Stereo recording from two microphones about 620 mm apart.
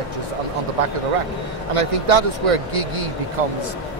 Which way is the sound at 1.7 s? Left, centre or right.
Right.